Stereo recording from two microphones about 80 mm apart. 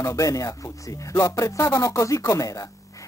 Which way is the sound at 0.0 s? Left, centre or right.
Left.